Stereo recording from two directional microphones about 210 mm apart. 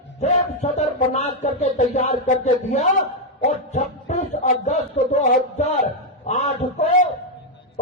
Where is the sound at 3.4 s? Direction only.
35° left (ahead or behind).